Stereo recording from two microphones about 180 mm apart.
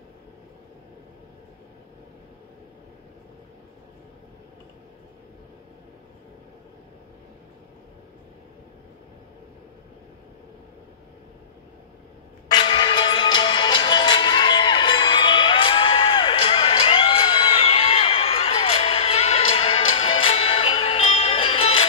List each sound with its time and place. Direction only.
12.4 s music: 25° left (ahead or behind)